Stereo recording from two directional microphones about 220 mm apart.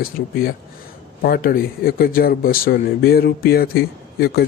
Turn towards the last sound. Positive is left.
turn(degrees=45)  # may be behind; listen again after turning